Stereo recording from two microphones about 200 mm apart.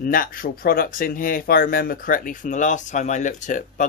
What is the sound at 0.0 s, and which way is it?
Speech, 45° left (ahead or behind).